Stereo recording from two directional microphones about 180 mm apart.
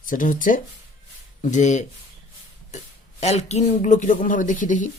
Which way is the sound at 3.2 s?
35° left (ahead or behind).